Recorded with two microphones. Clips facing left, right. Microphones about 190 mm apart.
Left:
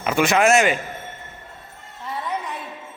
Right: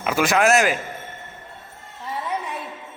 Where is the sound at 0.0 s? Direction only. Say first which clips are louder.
Left 1 dB; centre (ahead or behind).